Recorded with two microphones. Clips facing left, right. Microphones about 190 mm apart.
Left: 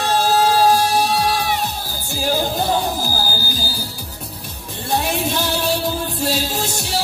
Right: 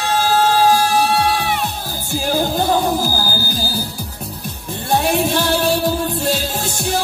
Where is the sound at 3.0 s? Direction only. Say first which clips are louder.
Right 3 dB; 55° right (ahead or behind).